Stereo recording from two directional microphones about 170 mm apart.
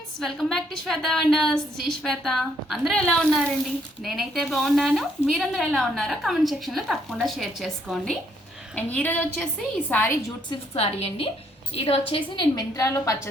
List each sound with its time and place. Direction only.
0.2 s a woman's voice: centre (ahead or behind)
10.5 s a woman's voice: 35° left (ahead or behind); by 13.1 s 20° left (ahead or behind)